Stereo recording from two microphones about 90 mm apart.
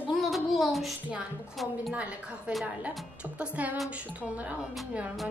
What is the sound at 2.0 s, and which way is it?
Speech, 15° right (ahead or behind).